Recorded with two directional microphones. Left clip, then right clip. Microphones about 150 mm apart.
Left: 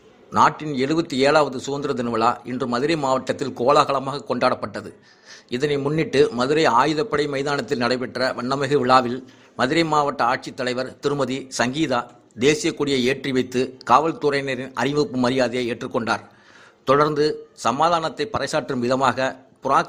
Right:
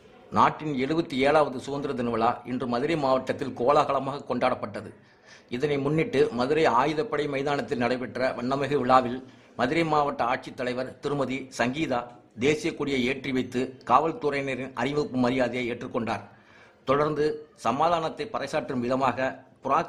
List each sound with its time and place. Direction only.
0.3 s a man's voice: 15° left (ahead or behind)